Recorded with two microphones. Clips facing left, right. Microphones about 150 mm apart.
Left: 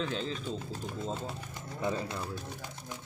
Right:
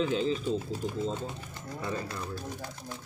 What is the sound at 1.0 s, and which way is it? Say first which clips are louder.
Speech: right 3 dB; 10° left (ahead or behind).